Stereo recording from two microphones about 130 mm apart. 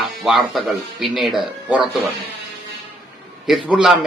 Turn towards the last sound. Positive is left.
turn(degrees=-5)  # may be behind; listen again after turning